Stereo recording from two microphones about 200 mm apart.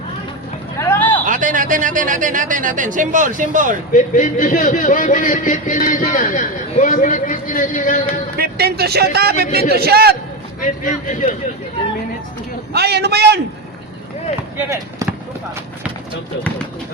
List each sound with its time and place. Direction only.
0.8 s vehicle: 10° left (ahead or behind)
1.2 s a man's voice: 40° right (ahead or behind)
3.9 s a man's voice: 40° left (ahead or behind)
8.4 s a man's voice: 50° right (ahead or behind)
10.6 s a man's voice: 40° left (ahead or behind)
12.7 s a man's voice: 55° right (ahead or behind)
14.6 s speech: 15° right (ahead or behind)